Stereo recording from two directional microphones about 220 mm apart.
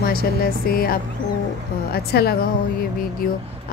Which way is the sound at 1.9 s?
45° left (ahead or behind).